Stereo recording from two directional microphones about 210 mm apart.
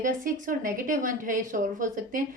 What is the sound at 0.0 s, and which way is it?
A woman's voice, 40° right (ahead or behind).